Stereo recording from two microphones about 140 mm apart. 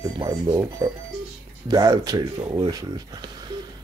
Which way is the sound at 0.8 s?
30° right (ahead or behind).